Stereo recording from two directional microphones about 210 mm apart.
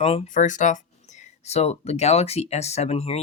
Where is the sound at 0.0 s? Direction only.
30° left (ahead or behind).